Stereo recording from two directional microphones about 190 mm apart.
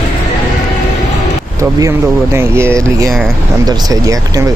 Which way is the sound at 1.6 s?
15° right (ahead or behind).